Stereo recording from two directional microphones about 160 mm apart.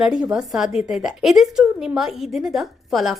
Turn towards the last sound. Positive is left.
turn(degrees=0)  # may be behind; listen again after turning